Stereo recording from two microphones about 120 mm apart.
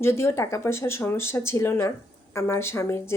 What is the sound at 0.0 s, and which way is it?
Speech, 20° left (ahead or behind).